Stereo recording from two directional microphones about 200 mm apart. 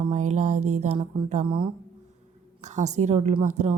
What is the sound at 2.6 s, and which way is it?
Speech, 35° right (ahead or behind).